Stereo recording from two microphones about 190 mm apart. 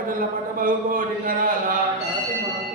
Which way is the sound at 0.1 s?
45° right (ahead or behind).